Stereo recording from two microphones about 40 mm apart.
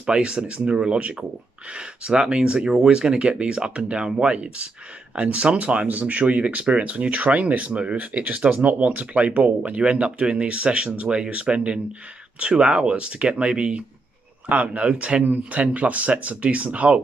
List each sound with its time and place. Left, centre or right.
0.0 s speech: right
9.4 s speech: right
15.2 s speech: right